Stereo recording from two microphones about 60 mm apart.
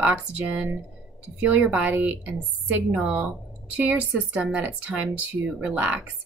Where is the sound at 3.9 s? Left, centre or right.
Right.